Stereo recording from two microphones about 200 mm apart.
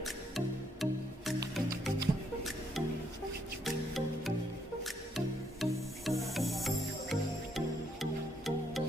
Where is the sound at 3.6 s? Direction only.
Centre (ahead or behind).